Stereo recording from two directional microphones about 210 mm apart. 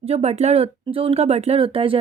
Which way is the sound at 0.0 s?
30° right (ahead or behind).